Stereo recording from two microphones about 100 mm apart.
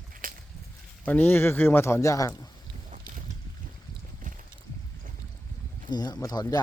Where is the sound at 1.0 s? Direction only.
15° left (ahead or behind); by 2.5 s 35° left (ahead or behind).